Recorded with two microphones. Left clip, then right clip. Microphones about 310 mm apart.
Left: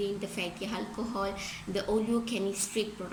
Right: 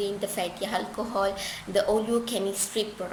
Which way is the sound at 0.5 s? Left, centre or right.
Right.